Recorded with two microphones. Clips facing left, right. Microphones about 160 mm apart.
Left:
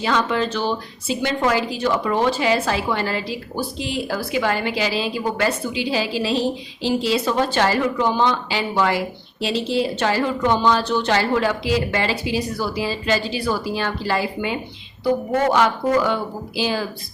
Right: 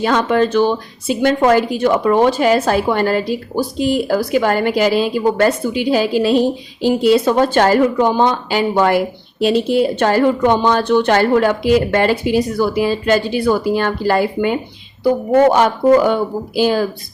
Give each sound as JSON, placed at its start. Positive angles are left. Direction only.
{"t": 0.0, "sound": "a woman's voice", "side_deg": -50}